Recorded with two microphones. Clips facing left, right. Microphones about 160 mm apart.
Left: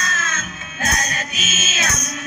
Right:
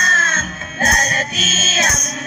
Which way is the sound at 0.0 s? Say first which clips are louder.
Right 4 dB; 40° right (ahead or behind).